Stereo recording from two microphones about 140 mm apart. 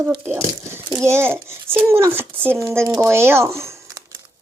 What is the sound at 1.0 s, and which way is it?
A child's voice, 20° right (ahead or behind).